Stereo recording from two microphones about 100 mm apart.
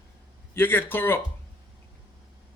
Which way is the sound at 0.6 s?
20° left (ahead or behind).